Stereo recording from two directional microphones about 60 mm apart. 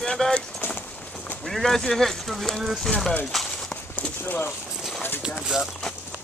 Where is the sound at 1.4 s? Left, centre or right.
Centre.